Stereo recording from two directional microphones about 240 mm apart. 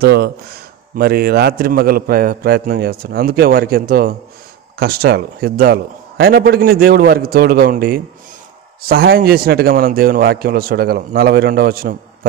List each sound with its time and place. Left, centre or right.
0.0 s a man's voice: right